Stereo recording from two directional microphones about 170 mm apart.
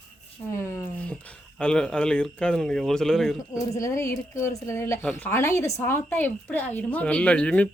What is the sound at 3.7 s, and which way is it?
Speech, 20° left (ahead or behind).